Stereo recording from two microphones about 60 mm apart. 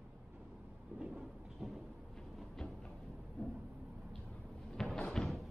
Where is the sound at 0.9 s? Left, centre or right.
Right.